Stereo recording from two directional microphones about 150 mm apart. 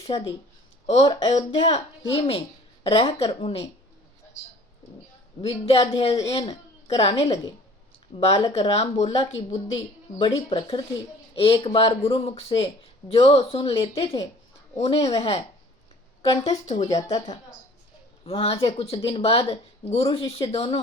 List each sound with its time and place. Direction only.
0.0 s speech: 35° left (ahead or behind)
5.4 s a woman's voice: 40° left (ahead or behind)
18.3 s speech: 40° left (ahead or behind)